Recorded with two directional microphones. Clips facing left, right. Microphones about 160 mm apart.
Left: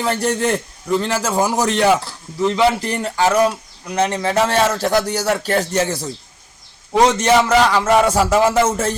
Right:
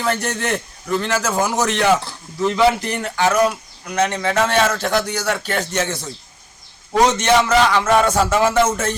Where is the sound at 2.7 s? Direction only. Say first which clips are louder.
Left 2 dB; 35° left (ahead or behind).